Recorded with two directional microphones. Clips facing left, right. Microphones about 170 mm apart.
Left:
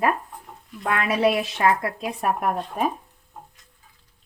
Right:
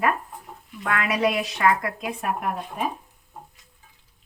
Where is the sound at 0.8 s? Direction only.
30° left (ahead or behind).